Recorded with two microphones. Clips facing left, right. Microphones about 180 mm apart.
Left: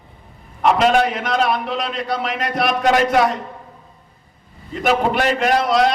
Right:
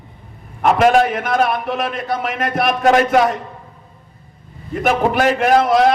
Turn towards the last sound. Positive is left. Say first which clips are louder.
# right 3 dB
turn(degrees=-50)  # may be behind; listen again after turning